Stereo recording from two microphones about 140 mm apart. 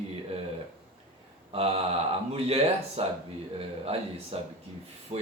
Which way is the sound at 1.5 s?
45° right (ahead or behind).